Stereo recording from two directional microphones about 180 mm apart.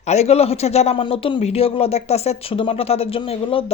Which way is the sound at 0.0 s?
35° left (ahead or behind).